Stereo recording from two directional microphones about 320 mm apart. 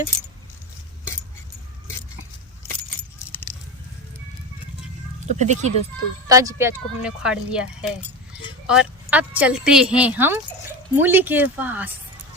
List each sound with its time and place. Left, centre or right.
5.4 s speech: right
6.2 s speech: centre